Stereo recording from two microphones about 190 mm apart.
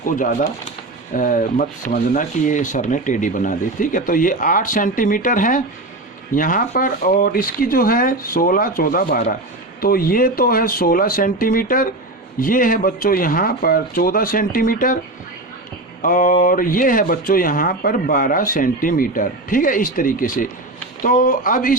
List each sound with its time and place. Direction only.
0.0 s speech: 45° left (ahead or behind)
16.0 s speech: 45° left (ahead or behind)